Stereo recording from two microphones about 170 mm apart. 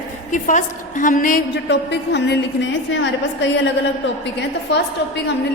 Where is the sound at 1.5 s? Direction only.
90° left.